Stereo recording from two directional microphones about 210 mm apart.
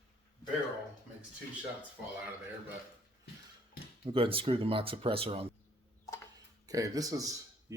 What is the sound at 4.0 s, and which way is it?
Speech, 25° right (ahead or behind).